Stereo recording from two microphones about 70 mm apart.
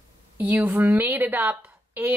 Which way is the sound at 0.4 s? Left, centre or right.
Right.